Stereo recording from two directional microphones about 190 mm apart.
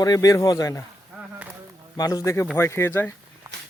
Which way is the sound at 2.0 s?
20° left (ahead or behind).